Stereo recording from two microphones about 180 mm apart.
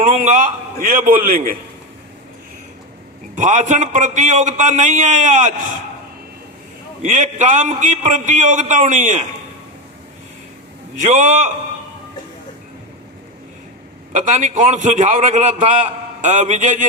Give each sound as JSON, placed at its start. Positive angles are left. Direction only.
{"t": 0.0, "sound": "a man's voice", "side_deg": -45}
{"t": 3.3, "sound": "a man's voice", "side_deg": -45}
{"t": 7.0, "sound": "a man's voice", "side_deg": -45}
{"t": 10.9, "sound": "a man's voice", "side_deg": -45}
{"t": 14.1, "sound": "a man's voice", "side_deg": -45}